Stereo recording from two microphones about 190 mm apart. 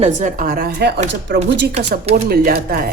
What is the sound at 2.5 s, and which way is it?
Speech, 55° right (ahead or behind).